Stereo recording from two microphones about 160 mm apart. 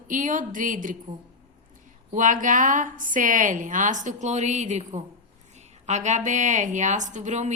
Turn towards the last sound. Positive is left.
turn(degrees=-50)  # may be behind; listen again after turning